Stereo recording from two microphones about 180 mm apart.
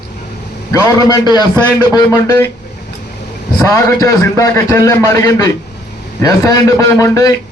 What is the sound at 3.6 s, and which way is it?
A man's voice, 20° left (ahead or behind).